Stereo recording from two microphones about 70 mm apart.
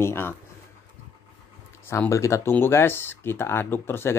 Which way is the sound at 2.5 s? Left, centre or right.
Left.